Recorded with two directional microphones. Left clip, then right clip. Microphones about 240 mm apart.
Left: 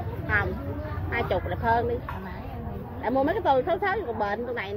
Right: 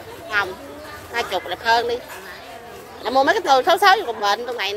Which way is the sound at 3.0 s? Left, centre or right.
Right.